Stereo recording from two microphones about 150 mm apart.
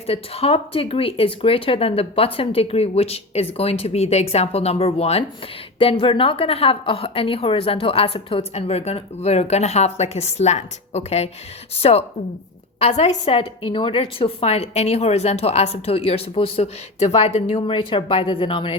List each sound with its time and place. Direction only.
0.1 s a woman's voice: 40° left (ahead or behind)